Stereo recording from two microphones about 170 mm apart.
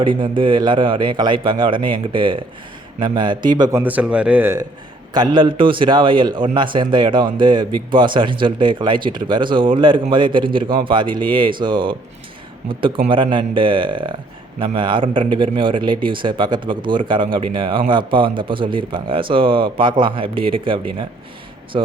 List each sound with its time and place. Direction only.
0.0 s speech: 30° right (ahead or behind); by 4.6 s 10° right (ahead or behind)
5.1 s speech: 25° right (ahead or behind)
13.1 s speech: 30° right (ahead or behind)